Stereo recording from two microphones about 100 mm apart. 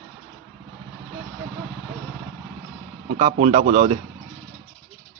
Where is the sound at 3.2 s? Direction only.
90° right.